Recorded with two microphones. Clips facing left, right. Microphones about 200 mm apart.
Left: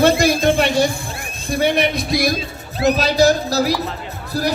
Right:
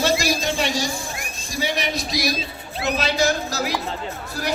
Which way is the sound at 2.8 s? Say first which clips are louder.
Left 7 dB; 40° left (ahead or behind).